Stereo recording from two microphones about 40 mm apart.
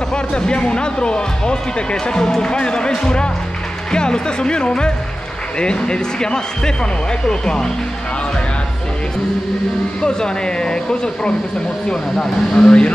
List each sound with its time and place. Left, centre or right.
0.1 s speech: left
10.0 s speech: centre